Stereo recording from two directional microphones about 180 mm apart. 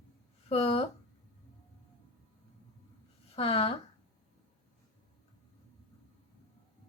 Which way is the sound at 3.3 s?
30° left (ahead or behind).